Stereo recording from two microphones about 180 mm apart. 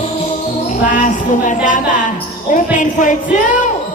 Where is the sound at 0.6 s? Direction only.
45° left (ahead or behind).